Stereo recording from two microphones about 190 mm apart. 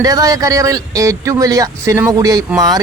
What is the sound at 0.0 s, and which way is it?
A man's voice, 20° right (ahead or behind).